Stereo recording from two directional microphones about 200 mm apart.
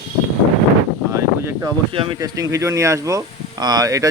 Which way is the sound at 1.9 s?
20° right (ahead or behind).